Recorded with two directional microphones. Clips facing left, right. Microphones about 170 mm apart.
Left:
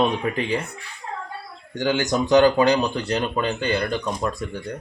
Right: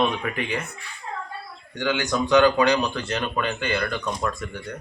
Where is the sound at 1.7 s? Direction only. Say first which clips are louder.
Left 3 dB; 40° left (ahead or behind).